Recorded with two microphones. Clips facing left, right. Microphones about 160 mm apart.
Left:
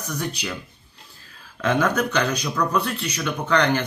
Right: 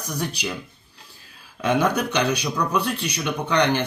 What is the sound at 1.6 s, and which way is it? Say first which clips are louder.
Speech: even; 10° right (ahead or behind).